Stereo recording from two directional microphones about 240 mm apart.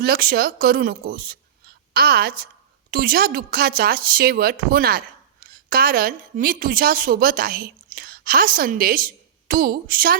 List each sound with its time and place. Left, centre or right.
0.0 s speech: right